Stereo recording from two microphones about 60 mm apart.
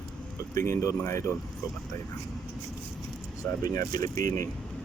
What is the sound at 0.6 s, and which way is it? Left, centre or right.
Speech, left.